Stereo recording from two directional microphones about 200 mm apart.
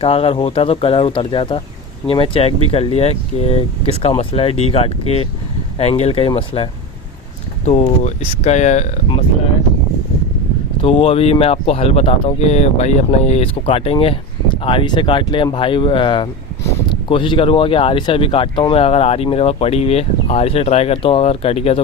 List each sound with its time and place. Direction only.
0.0 s speech: 30° left (ahead or behind)
10.8 s speech: 30° left (ahead or behind)